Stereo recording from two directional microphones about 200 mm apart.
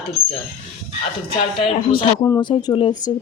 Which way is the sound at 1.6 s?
30° left (ahead or behind).